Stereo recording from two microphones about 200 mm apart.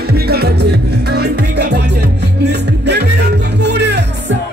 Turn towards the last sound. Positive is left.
turn(degrees=-55)  # may be behind; listen again after turning